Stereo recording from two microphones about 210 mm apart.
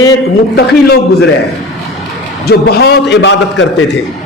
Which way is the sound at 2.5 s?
50° left (ahead or behind).